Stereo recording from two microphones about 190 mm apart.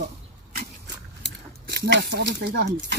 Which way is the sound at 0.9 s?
60° right (ahead or behind).